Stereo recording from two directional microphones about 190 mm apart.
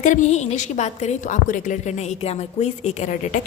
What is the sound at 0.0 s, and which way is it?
A woman's voice, 40° left (ahead or behind).